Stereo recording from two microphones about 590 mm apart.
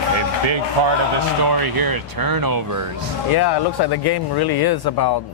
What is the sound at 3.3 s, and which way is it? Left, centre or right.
Speech, left.